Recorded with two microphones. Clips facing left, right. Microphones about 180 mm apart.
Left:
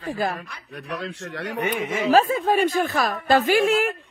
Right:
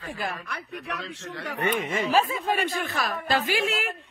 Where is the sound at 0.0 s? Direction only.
40° left (ahead or behind).